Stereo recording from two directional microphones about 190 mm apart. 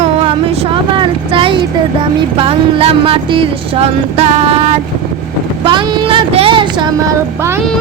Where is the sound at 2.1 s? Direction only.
30° right (ahead or behind).